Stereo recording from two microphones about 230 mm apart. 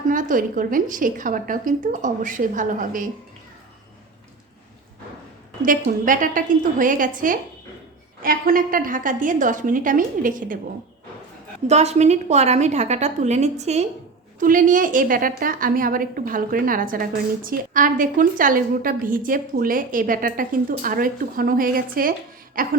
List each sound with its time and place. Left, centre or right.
0.1 s a woman's voice: right
5.6 s a woman's voice: right
11.7 s a woman's voice: right